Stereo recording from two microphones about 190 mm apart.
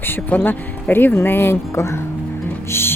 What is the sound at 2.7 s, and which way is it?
Music, 10° left (ahead or behind).